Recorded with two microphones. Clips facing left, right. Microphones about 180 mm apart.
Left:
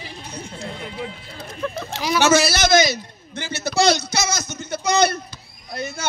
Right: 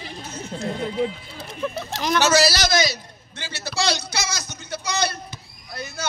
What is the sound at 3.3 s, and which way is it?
A man's voice, 20° left (ahead or behind).